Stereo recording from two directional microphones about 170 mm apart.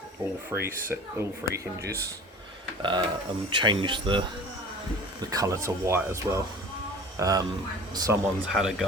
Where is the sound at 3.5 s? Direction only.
25° right (ahead or behind).